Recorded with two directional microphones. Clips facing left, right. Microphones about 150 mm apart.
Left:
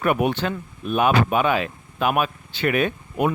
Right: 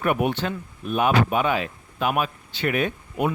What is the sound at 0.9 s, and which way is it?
Speech, 70° left (ahead or behind).